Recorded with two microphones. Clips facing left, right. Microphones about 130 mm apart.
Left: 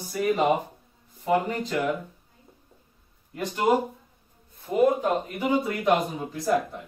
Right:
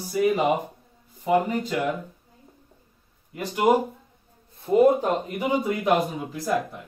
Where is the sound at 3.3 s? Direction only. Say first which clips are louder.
Right 2 dB; 10° right (ahead or behind).